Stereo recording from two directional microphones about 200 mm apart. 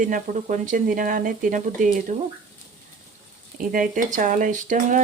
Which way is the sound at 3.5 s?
40° right (ahead or behind).